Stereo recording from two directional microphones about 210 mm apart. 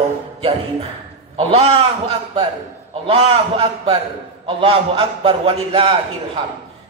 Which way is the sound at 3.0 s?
25° right (ahead or behind).